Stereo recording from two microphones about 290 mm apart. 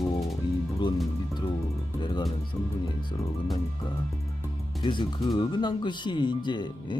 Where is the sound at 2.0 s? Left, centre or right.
Centre.